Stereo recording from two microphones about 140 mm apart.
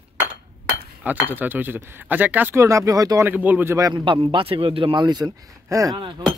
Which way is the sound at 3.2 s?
10° right (ahead or behind).